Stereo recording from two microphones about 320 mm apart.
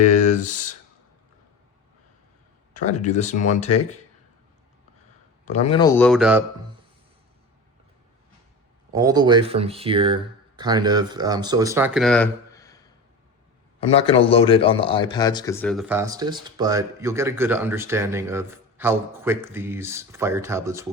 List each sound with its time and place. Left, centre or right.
0.0 s speech: left
2.7 s speech: left
5.5 s speech: centre
8.9 s speech: centre